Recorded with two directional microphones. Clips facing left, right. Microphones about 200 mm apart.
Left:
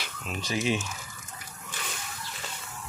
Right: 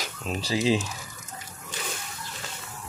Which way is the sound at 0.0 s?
35° right (ahead or behind).